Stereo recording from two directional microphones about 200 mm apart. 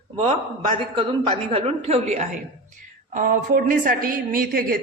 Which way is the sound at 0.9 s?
30° right (ahead or behind).